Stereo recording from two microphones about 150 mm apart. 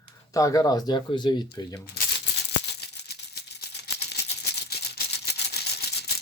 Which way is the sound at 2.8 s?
90° left.